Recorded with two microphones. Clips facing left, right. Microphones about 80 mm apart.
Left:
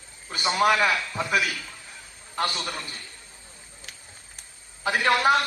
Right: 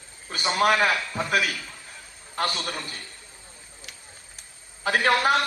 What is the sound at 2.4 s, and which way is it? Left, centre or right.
Speech, right.